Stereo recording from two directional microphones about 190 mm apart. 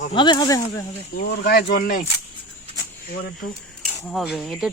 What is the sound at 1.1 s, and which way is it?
Speech, 55° left (ahead or behind).